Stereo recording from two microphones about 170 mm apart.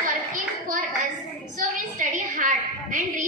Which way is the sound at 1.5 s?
50° right (ahead or behind).